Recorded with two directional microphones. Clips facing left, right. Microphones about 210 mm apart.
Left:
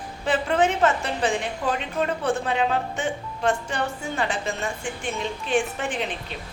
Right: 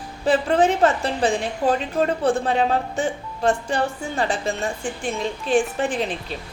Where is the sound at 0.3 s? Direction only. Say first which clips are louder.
Right 4 dB; 35° right (ahead or behind).